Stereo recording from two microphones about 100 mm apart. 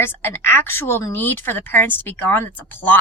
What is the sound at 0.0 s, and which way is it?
Speech, 20° left (ahead or behind).